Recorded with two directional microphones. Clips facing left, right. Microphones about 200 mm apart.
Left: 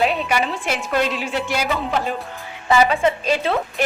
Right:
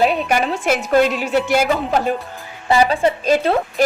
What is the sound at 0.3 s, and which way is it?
A woman's voice, 45° right (ahead or behind).